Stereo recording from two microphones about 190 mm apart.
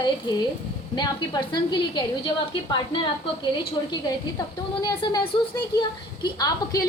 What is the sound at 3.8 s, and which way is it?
A woman's voice, 20° left (ahead or behind).